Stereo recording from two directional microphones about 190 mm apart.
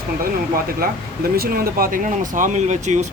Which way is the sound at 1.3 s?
50° right (ahead or behind).